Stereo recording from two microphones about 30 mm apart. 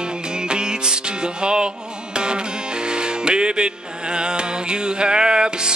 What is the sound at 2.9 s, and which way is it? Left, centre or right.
Music, right.